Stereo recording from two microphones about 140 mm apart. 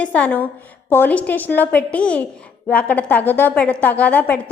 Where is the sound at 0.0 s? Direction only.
10° left (ahead or behind).